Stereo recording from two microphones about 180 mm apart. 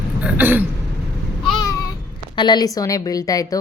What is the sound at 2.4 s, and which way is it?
A woman's voice, 25° left (ahead or behind).